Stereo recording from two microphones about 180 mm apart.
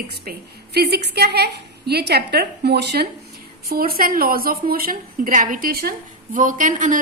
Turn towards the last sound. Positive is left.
turn(degrees=-45)  # may be behind; listen again after turning